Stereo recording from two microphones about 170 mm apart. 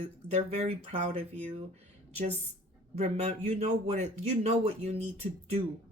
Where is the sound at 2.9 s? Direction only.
40° right (ahead or behind).